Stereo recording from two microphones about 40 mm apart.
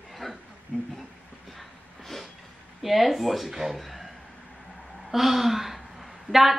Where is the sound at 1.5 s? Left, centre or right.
Centre.